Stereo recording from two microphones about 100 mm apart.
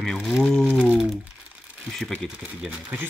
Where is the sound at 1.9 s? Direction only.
5° left (ahead or behind).